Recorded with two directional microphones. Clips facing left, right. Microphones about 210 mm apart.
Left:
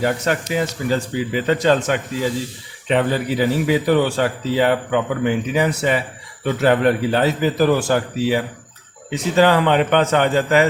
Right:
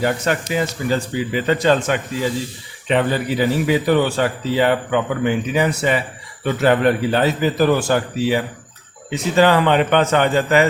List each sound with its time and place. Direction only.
0.0 s speech: 40° left (ahead or behind)